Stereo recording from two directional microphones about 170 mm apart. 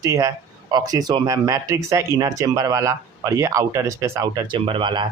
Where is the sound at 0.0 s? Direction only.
20° right (ahead or behind).